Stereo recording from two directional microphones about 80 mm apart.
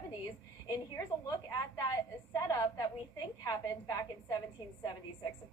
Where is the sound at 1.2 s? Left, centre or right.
Left.